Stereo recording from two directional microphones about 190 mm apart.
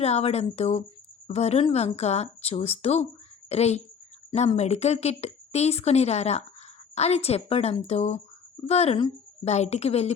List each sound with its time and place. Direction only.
0.0 s speech: 35° left (ahead or behind)